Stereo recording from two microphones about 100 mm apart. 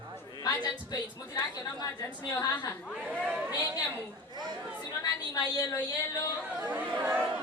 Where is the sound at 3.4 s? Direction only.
20° right (ahead or behind).